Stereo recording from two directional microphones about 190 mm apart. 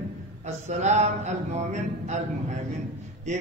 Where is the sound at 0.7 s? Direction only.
35° right (ahead or behind).